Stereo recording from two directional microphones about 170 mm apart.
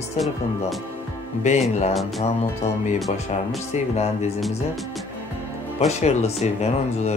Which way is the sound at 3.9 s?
40° left (ahead or behind).